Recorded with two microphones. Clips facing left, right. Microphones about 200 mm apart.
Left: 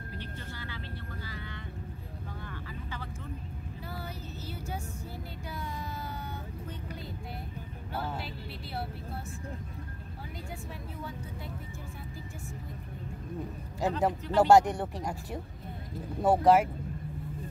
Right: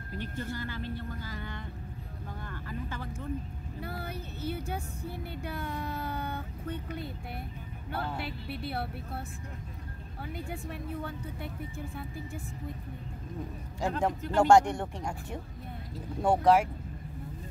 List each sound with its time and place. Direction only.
0.2 s speech: 45° right (ahead or behind)
2.4 s vehicle: 50° right (ahead or behind)
3.8 s speech: 60° right (ahead or behind)
8.2 s a woman's voice: 60° right (ahead or behind)
10.3 s a woman's voice: 60° right (ahead or behind)
13.7 s speech: 5° left (ahead or behind)